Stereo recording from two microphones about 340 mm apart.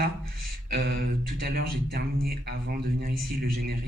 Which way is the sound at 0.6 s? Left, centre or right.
Right.